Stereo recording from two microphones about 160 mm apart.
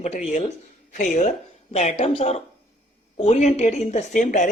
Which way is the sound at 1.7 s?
45° left (ahead or behind).